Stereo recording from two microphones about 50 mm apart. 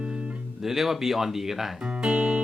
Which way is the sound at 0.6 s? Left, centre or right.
Centre.